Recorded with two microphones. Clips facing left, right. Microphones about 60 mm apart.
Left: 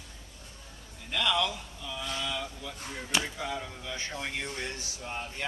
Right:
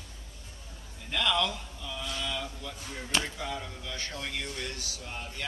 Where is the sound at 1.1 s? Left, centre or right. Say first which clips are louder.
Even; centre.